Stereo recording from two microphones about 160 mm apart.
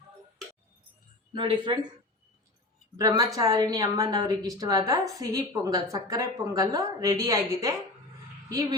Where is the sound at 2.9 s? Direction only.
20° right (ahead or behind).